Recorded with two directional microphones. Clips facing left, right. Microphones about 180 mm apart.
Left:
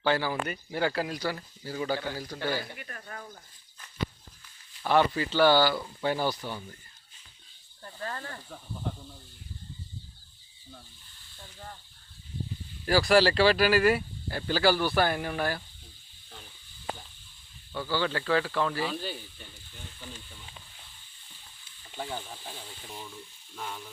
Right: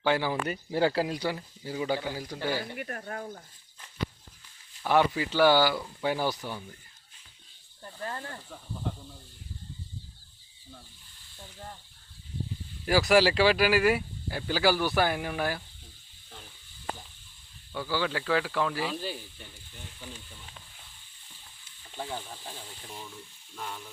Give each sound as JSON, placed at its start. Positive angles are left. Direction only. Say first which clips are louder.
{"t": 0.0, "sound": "speech", "louder": "right 1 dB", "side_deg": -15}
{"t": 2.7, "sound": "speech", "louder": "right 7 dB", "side_deg": -45}
{"t": 4.8, "sound": "speech", "louder": "even", "side_deg": -10}
{"t": 7.9, "sound": "speech", "louder": "even", "side_deg": -15}
{"t": 12.8, "sound": "speech", "louder": "even", "side_deg": -15}
{"t": 17.7, "sound": "speech", "louder": "left 1 dB", "side_deg": -10}
{"t": 21.9, "sound": "speech", "louder": "even", "side_deg": 0}